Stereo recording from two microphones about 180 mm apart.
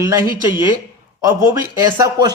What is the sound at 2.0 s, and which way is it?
Speech, 20° right (ahead or behind).